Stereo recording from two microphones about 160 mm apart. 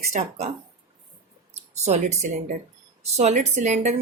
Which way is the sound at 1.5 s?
45° right (ahead or behind).